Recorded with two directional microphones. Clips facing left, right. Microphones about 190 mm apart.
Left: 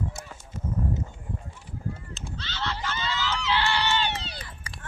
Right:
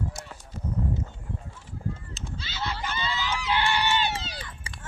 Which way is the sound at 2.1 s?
10° right (ahead or behind).